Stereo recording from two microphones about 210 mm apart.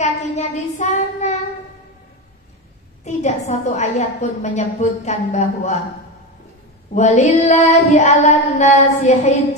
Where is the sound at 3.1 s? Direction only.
35° left (ahead or behind).